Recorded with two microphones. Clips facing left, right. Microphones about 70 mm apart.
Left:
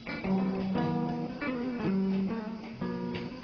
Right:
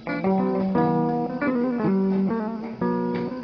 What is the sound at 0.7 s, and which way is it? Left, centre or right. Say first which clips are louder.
Guitar: right 11 dB; right.